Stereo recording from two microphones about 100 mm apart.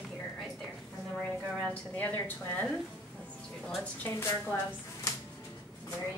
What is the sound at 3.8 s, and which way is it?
A woman's voice, 20° left (ahead or behind).